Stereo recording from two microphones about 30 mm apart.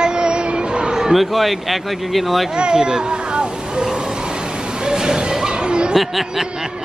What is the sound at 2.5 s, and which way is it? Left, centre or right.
Vehicle, right.